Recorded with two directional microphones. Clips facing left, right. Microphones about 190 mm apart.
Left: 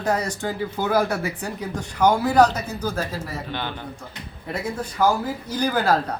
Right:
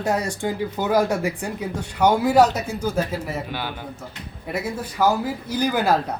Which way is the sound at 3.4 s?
10° right (ahead or behind).